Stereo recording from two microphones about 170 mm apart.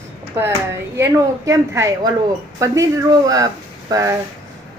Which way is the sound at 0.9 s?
20° right (ahead or behind).